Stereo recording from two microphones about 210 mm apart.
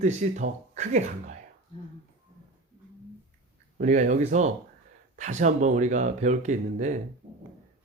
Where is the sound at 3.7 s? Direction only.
35° right (ahead or behind).